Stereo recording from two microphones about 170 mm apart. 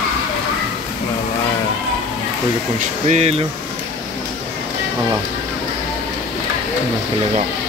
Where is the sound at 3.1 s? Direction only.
40° right (ahead or behind).